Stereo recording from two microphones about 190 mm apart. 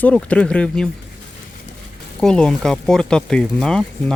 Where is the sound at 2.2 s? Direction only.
5° left (ahead or behind).